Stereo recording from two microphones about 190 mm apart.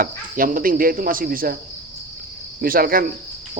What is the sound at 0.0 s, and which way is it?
Speech, 50° right (ahead or behind).